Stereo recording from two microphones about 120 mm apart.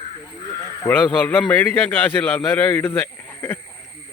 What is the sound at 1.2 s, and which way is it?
A man's voice, 15° left (ahead or behind).